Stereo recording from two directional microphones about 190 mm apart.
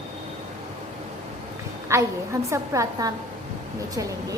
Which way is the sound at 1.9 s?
15° right (ahead or behind).